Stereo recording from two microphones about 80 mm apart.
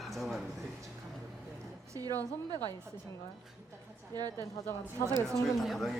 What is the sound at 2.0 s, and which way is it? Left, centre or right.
Speech, right.